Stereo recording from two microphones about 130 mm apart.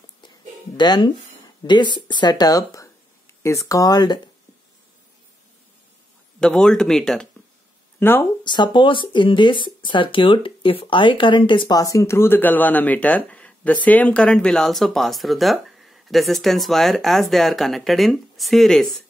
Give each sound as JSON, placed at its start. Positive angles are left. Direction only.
{"t": 0.7, "sound": "speech", "side_deg": 35}
{"t": 6.4, "sound": "speech", "side_deg": 5}
{"t": 8.0, "sound": "speech", "side_deg": 15}
{"t": 8.5, "sound": "speech", "side_deg": 35}
{"t": 11.8, "sound": "speech", "side_deg": 25}